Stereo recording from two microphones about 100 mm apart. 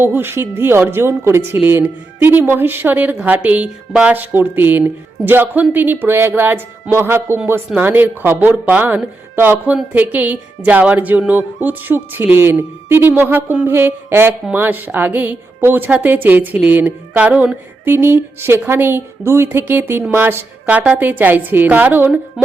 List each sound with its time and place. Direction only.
0.0 s a woman's voice: 20° right (ahead or behind)